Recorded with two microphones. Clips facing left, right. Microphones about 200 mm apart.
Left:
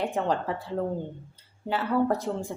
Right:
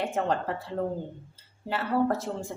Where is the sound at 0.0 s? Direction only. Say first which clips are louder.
Left 1 dB; centre (ahead or behind).